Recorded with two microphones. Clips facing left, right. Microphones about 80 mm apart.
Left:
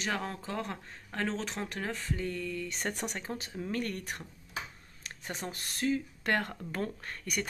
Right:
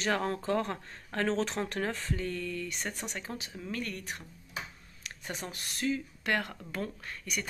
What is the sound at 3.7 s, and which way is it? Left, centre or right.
Speech, left.